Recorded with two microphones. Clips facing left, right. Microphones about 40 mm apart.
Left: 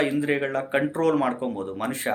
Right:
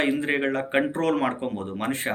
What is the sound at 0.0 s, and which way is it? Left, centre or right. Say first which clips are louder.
Speech: even; right.